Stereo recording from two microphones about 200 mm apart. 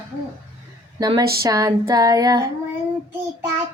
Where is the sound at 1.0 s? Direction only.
20° right (ahead or behind).